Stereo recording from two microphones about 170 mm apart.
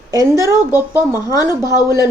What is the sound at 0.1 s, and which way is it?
Speech, 20° right (ahead or behind).